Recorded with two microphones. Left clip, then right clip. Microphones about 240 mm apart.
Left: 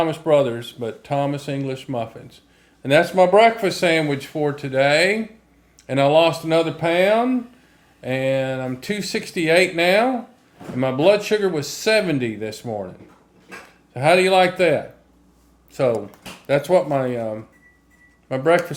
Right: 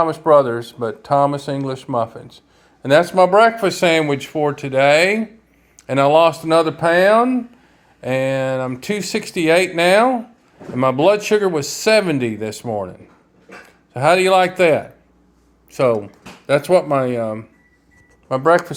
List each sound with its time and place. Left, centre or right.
0.6 s speech: centre
13.9 s speech: right
18.3 s speech: centre